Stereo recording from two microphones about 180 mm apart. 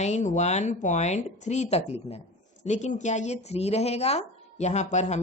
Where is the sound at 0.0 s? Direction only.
40° left (ahead or behind).